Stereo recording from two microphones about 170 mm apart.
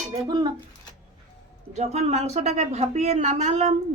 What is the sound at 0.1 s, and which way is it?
Speech, 25° right (ahead or behind).